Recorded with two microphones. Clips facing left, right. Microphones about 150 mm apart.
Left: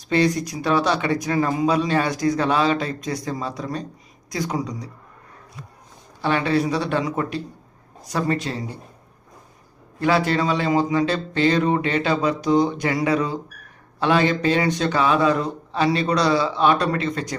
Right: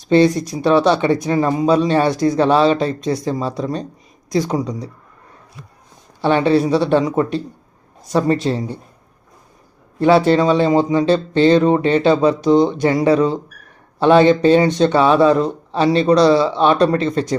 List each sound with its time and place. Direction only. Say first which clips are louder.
0.1 s speech: right 7 dB; 25° right (ahead or behind)
6.2 s speech: right 6 dB; 30° right (ahead or behind)
10.0 s speech: right 7 dB; 30° right (ahead or behind)